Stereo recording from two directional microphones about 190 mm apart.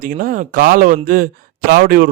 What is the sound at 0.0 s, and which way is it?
Speech, 45° right (ahead or behind).